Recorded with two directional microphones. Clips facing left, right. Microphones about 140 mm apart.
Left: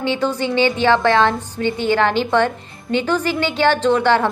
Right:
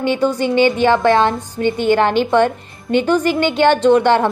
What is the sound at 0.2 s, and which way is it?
A woman's voice, 15° right (ahead or behind).